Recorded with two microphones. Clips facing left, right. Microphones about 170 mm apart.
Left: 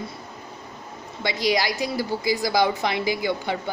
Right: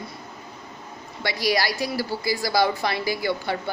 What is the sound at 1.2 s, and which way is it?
Speech, 20° left (ahead or behind).